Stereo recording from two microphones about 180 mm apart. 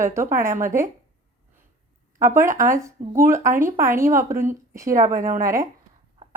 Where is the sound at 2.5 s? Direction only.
15° right (ahead or behind).